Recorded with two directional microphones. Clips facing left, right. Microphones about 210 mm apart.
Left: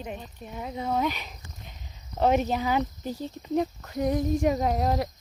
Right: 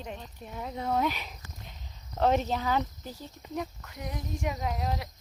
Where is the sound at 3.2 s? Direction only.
30° left (ahead or behind).